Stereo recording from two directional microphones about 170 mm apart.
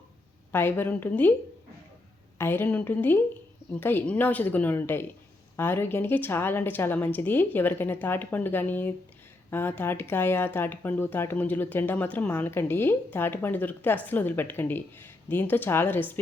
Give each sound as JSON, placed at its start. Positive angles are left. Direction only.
{"t": 0.5, "sound": "speech", "side_deg": 10}
{"t": 2.4, "sound": "speech", "side_deg": 10}